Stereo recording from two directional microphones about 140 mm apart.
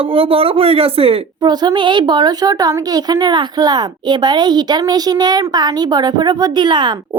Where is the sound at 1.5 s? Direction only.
30° right (ahead or behind).